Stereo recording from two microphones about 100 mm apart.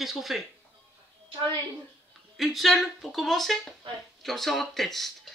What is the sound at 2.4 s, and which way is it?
Speech, centre (ahead or behind).